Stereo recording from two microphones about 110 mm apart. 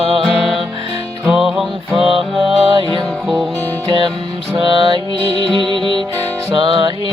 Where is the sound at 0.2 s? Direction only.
Centre (ahead or behind).